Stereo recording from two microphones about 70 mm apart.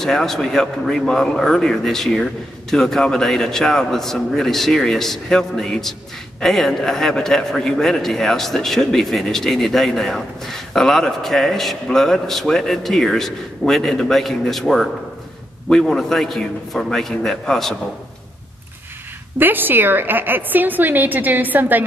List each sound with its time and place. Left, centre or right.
0.0 s a man's voice: centre
19.3 s a woman's voice: right